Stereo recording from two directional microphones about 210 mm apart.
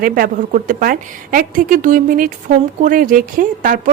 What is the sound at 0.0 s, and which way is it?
A woman's voice, 45° right (ahead or behind).